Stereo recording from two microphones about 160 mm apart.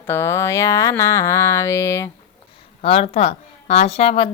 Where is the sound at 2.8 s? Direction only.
40° left (ahead or behind).